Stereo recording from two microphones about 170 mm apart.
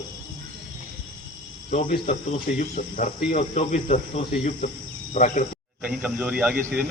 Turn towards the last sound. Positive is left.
turn(degrees=-10)  # may be behind; listen again after turning